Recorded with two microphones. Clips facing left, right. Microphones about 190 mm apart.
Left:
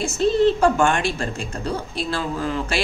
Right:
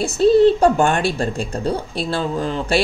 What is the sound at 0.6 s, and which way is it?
Speech, 35° right (ahead or behind).